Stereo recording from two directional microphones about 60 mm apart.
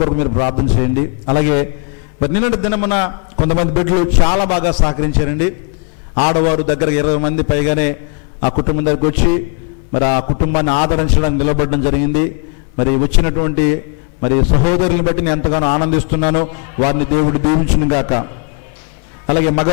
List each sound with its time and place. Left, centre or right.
0.2 s a man's voice: centre